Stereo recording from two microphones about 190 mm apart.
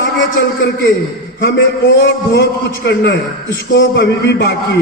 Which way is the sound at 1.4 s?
65° left (ahead or behind).